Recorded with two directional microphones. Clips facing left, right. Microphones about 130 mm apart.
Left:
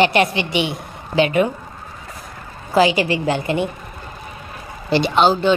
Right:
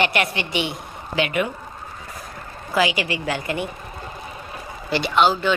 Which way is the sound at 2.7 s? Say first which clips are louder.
Left 6 dB; 30° left (ahead or behind).